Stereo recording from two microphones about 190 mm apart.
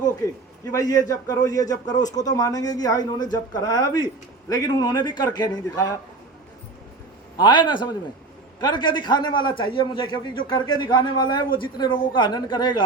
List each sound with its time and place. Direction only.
0.6 s a man's voice: 15° left (ahead or behind)
7.3 s a man's voice: 25° left (ahead or behind)